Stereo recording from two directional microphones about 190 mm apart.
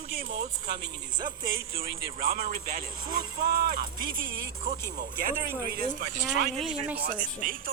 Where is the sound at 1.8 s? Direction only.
50° right (ahead or behind).